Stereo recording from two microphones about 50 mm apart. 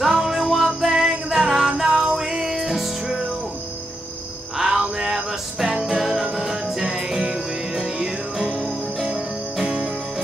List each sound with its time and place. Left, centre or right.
0.0 s music: centre
4.6 s music: centre